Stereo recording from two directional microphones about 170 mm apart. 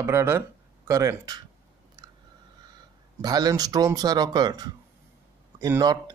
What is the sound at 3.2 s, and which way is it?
Speech, 25° right (ahead or behind).